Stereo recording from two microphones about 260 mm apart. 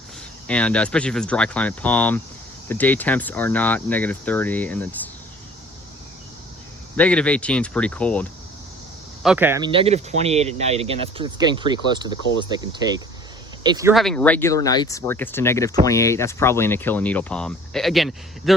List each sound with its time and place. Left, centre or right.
0.4 s speech: centre
6.9 s speech: centre
9.2 s speech: centre
13.9 s speech: centre